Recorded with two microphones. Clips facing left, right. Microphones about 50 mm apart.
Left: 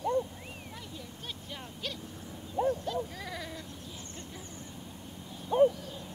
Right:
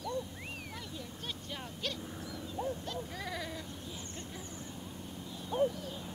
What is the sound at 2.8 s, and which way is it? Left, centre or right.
Sheep, centre.